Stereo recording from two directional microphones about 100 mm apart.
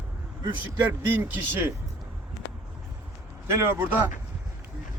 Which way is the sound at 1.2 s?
25° right (ahead or behind).